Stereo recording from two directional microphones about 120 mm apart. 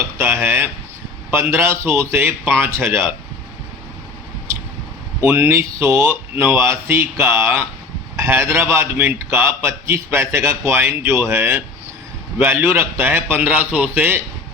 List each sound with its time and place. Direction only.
0.2 s a man's voice: 15° right (ahead or behind)
5.2 s a man's voice: 20° right (ahead or behind)